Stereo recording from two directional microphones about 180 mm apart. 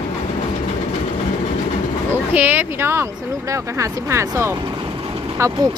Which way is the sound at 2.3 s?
10° right (ahead or behind).